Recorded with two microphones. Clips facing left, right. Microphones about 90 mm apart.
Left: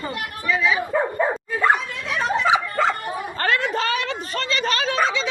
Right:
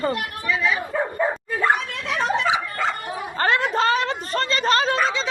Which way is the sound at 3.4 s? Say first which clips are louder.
Right 3 dB; 25° right (ahead or behind).